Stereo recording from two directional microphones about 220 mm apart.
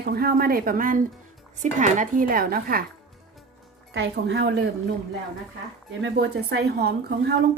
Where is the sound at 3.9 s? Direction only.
50° right (ahead or behind).